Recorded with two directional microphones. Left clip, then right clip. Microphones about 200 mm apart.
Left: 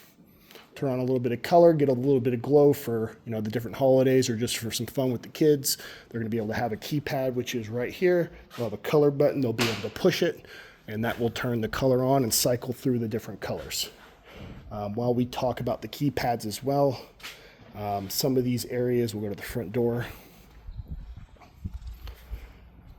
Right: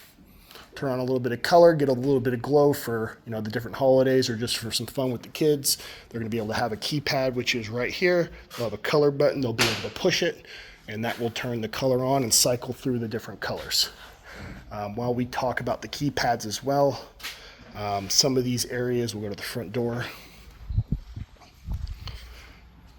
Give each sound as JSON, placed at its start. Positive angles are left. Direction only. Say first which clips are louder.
{"t": 0.5, "sound": "speech", "louder": "right 1 dB", "side_deg": 55}
{"t": 14.7, "sound": "speech", "louder": "left 1 dB", "side_deg": 55}
{"t": 17.7, "sound": "speech", "louder": "right 6 dB", "side_deg": 35}